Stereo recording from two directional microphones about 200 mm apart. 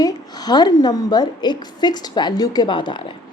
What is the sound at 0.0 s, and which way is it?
A woman's voice, 20° left (ahead or behind).